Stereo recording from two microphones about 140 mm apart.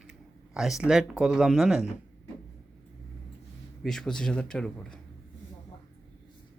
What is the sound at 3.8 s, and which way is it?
Speech, 5° left (ahead or behind).